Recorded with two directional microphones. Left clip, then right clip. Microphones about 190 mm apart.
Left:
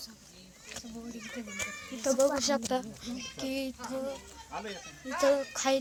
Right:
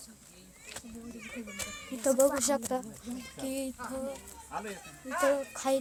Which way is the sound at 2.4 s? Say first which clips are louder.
Even; 20° right (ahead or behind).